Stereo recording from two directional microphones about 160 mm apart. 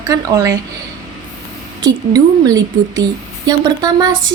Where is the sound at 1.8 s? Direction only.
25° right (ahead or behind).